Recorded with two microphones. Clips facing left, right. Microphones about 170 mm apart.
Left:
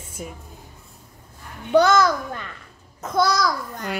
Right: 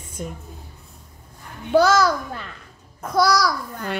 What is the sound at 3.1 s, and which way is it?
Speech, 25° left (ahead or behind).